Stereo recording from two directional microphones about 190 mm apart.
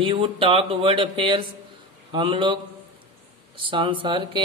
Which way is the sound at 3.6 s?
25° right (ahead or behind).